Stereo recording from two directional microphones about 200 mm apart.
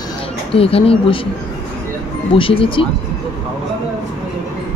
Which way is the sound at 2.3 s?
25° left (ahead or behind).